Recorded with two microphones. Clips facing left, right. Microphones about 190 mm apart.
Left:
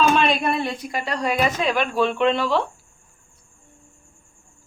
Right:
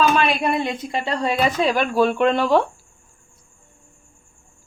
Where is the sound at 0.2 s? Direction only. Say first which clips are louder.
Right 1 dB; 10° right (ahead or behind); by 2.6 s 45° right (ahead or behind).